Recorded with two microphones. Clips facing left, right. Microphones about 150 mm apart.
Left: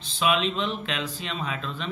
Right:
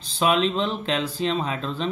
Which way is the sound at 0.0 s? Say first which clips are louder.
Right 3 dB; 35° right (ahead or behind).